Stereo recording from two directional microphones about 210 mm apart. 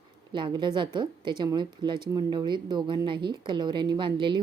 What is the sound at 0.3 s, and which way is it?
A woman's voice, 20° right (ahead or behind).